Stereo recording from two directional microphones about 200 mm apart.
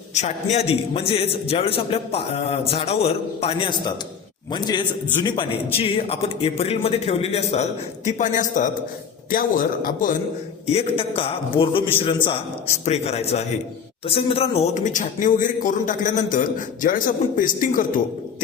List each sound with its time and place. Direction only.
0.1 s a man's voice: 35° left (ahead or behind)
10.7 s a man's voice: 30° left (ahead or behind)